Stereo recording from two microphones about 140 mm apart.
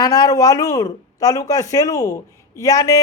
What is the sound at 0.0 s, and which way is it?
Speech, 25° left (ahead or behind).